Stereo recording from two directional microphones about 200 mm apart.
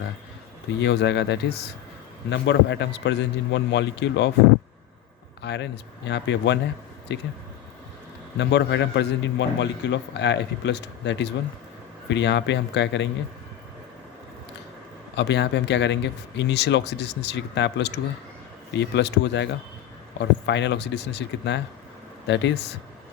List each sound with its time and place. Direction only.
0.8 s a man's voice: 60° left (ahead or behind)
5.4 s a man's voice: 60° left (ahead or behind)
8.4 s a man's voice: 60° left (ahead or behind)
15.1 s a man's voice: 60° left (ahead or behind)